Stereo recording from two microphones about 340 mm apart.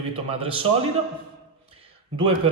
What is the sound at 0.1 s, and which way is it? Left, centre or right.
Speech, centre.